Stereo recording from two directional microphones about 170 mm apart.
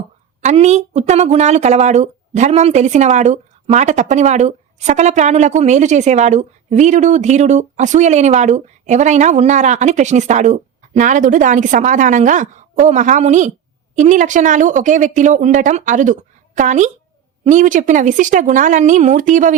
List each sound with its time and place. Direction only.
0.4 s a woman's voice: 40° right (ahead or behind)